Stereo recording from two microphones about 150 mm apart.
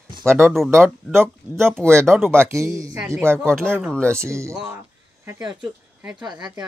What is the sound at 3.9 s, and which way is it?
Speech, 5° left (ahead or behind).